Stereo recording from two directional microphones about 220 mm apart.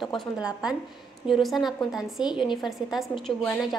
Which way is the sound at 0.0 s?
Centre (ahead or behind).